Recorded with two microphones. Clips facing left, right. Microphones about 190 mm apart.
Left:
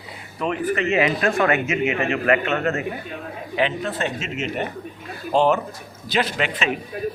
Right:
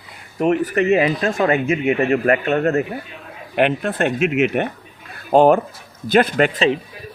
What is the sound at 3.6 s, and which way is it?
Speech, 60° right (ahead or behind).